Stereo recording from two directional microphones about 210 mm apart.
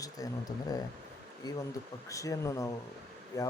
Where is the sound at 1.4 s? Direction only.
15° left (ahead or behind).